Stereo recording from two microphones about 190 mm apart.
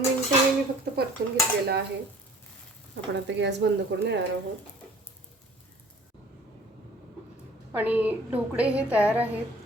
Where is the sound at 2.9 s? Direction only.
70° right (ahead or behind).